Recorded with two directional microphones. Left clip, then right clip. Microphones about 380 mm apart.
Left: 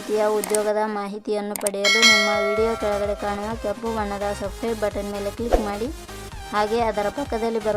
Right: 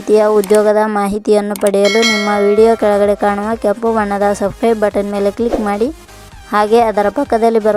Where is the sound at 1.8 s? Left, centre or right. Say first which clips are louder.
Even; centre.